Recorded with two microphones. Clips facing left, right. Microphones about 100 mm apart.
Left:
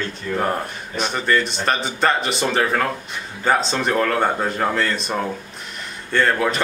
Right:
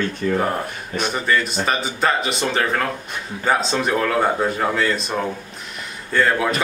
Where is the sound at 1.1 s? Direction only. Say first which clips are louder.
Left 1 dB; 5° right (ahead or behind).